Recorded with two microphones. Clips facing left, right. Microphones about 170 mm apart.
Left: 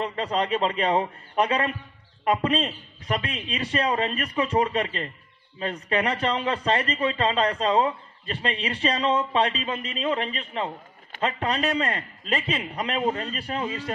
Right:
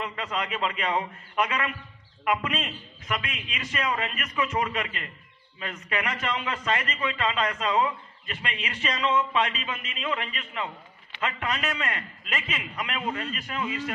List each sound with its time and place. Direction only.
0.0 s a man's voice: 35° left (ahead or behind)